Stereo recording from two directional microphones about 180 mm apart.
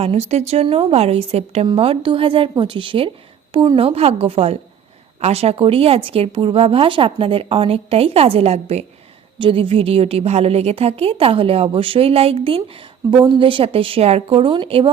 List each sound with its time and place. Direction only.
0.0 s a woman's voice: 35° right (ahead or behind)